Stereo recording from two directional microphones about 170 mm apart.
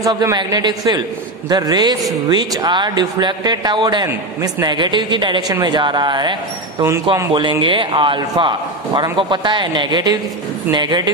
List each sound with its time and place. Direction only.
0.0 s speech: 20° right (ahead or behind)
7.3 s speech: 30° right (ahead or behind)